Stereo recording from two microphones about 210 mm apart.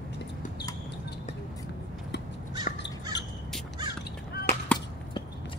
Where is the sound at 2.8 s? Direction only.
55° left (ahead or behind).